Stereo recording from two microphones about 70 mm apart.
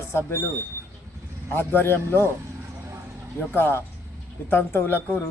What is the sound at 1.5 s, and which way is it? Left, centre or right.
Speech, left.